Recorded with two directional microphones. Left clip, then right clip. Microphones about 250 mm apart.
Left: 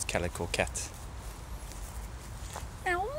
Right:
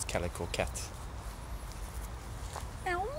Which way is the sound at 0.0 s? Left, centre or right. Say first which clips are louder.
Left 3 dB; centre.